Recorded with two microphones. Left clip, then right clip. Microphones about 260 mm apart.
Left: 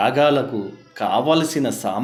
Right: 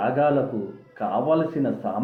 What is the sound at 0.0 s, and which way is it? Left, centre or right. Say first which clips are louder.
Speech: left 4 dB; left.